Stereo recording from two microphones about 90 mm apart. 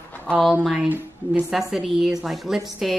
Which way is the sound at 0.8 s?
20° right (ahead or behind).